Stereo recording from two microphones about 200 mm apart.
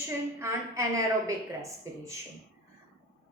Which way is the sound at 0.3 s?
15° right (ahead or behind).